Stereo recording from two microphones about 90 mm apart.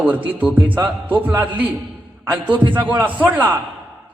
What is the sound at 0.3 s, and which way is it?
A man's voice, 20° right (ahead or behind).